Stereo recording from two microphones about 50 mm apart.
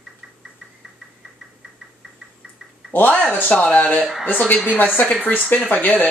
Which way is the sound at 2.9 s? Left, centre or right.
Left.